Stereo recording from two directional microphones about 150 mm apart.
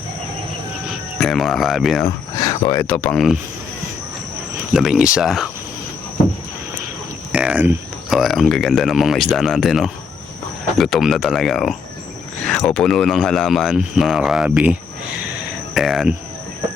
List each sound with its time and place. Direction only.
1.2 s a man's voice: centre (ahead or behind)
2.0 s speech: 25° left (ahead or behind)
2.8 s speech: 10° left (ahead or behind)
4.7 s a man's voice: 5° right (ahead or behind)
7.3 s cricket: 10° right (ahead or behind)
8.2 s a man's voice: centre (ahead or behind)